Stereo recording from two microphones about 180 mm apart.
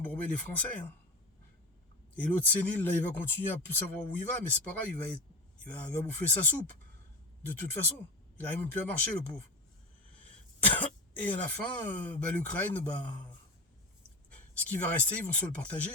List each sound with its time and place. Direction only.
0.0 s speech: 5° left (ahead or behind)
2.1 s speech: 10° left (ahead or behind)
8.4 s speech: 10° left (ahead or behind)
11.3 s speech: 10° left (ahead or behind)
14.3 s speech: 10° left (ahead or behind)